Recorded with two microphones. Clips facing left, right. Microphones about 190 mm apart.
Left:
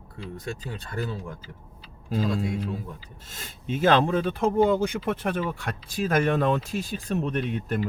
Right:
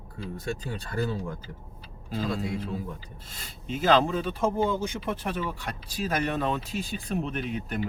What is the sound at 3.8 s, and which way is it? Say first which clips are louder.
Speech: left 2 dB; 55° left (ahead or behind).